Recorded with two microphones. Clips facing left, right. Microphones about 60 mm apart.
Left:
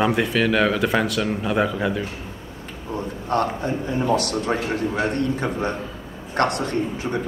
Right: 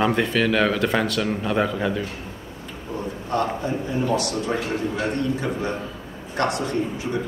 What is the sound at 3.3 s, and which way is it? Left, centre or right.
A man's voice, left.